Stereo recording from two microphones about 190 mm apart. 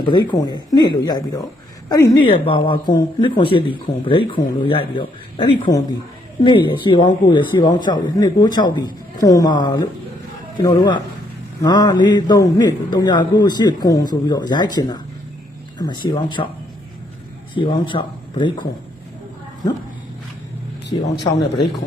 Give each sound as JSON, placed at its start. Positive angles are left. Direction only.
{"t": 0.0, "sound": "speech", "side_deg": 25}
{"t": 16.4, "sound": "speech", "side_deg": 25}